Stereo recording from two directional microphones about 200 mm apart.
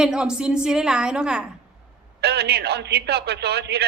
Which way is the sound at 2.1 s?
55° right (ahead or behind).